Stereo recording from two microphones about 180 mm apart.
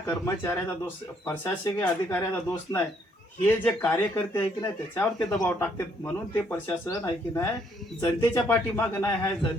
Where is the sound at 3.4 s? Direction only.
10° left (ahead or behind).